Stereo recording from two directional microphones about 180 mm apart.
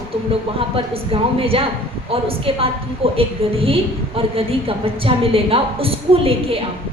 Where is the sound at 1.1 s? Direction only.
30° right (ahead or behind).